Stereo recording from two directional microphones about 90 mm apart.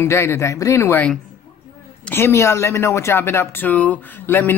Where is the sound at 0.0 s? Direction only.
30° left (ahead or behind).